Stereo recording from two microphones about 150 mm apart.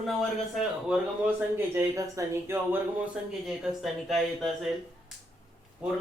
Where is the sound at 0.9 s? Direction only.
5° right (ahead or behind).